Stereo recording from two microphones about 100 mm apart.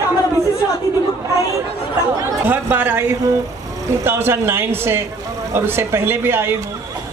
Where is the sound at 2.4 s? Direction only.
20° right (ahead or behind).